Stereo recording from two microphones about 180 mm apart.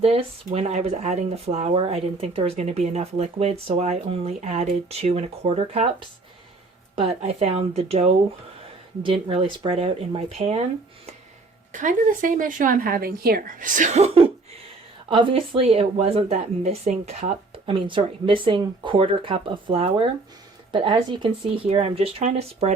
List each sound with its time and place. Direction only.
0.0 s speech: 35° right (ahead or behind)
11.7 s a woman's voice: 45° right (ahead or behind)